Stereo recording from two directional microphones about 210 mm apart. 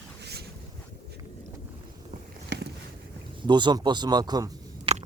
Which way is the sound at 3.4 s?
20° right (ahead or behind).